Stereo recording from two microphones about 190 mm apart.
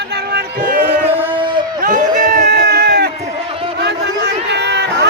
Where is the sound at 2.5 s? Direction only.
60° right (ahead or behind).